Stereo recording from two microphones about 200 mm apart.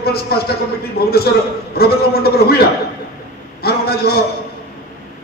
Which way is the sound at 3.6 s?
50° left (ahead or behind).